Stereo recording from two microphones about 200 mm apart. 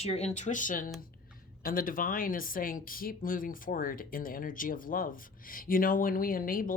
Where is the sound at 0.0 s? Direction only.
30° left (ahead or behind).